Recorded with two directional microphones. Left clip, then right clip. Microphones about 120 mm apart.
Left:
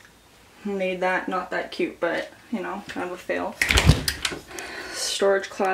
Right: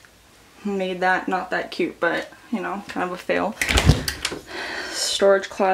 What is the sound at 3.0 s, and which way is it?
Speech, 45° right (ahead or behind).